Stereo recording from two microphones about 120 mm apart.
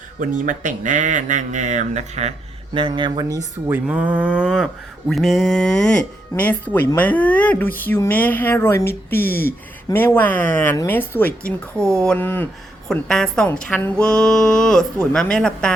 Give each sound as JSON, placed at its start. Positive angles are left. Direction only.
{"t": 0.3, "sound": "speech", "side_deg": -90}
{"t": 2.7, "sound": "speech", "side_deg": -45}
{"t": 3.7, "sound": "mantra", "side_deg": -10}
{"t": 11.8, "sound": "speech", "side_deg": -25}
{"t": 12.0, "sound": "mantra", "side_deg": 15}
{"t": 12.9, "sound": "speech", "side_deg": 5}
{"t": 15.1, "sound": "mantra", "side_deg": 5}